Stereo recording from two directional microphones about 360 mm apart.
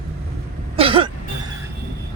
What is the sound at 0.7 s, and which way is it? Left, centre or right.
Cough, centre.